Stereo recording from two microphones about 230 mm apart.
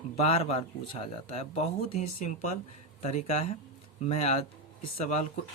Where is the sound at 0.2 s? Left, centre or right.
Left.